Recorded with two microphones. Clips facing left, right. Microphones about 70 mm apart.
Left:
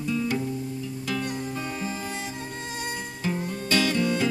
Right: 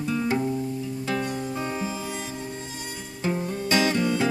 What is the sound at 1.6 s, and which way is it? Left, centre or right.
Music, centre.